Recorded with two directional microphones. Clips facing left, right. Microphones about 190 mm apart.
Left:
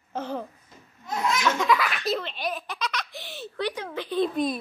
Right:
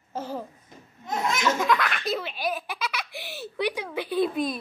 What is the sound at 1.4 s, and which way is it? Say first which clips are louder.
Baby laughter: even; centre (ahead or behind).